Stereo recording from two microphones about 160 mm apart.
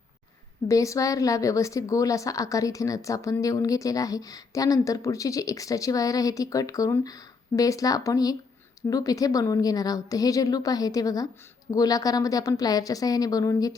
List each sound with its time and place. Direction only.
0.7 s a woman's voice: 20° left (ahead or behind)